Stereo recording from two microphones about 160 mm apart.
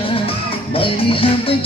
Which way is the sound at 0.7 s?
35° left (ahead or behind).